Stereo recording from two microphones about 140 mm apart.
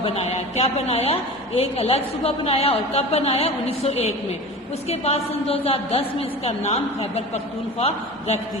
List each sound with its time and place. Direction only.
0.0 s a woman's voice: 45° left (ahead or behind)